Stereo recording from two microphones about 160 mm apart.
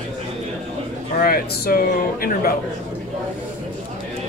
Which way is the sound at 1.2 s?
75° left (ahead or behind).